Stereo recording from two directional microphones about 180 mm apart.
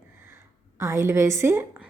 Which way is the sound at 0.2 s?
15° right (ahead or behind).